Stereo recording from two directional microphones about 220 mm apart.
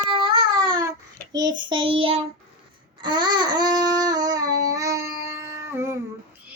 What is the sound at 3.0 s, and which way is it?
Babbling, 20° right (ahead or behind).